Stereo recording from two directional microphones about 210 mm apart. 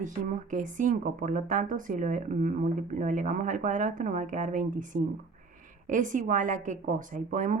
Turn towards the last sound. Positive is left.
turn(degrees=-40)  # may be behind; listen again after turning